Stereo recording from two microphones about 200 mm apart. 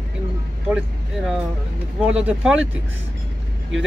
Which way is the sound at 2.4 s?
5° right (ahead or behind).